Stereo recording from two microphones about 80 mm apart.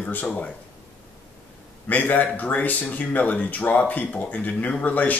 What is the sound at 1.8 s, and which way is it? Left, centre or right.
Speech, left.